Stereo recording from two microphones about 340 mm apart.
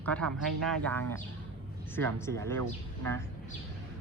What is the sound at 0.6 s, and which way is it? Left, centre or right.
Speech, centre.